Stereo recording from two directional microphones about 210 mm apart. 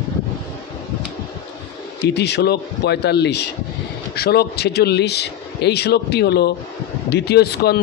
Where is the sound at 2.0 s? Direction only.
50° left (ahead or behind).